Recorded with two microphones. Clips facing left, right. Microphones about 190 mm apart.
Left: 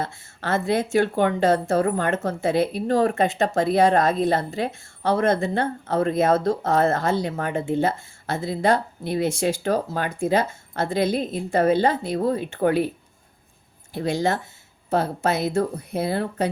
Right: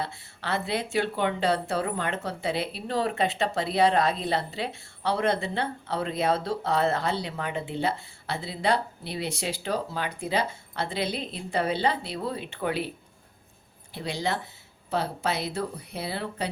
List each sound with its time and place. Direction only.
0.0 s speech: 45° left (ahead or behind)
13.9 s speech: 50° left (ahead or behind)